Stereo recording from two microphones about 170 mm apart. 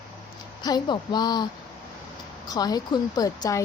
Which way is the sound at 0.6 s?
25° left (ahead or behind).